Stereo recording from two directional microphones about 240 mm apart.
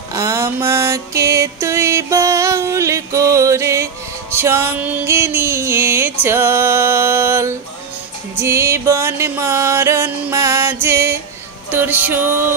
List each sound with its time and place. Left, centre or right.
0.1 s music: centre